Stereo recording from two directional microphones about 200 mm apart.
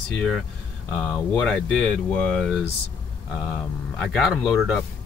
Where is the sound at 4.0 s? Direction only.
Centre (ahead or behind).